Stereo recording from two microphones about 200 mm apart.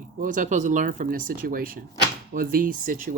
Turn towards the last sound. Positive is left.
turn(degrees=-45)  # may be behind; listen again after turning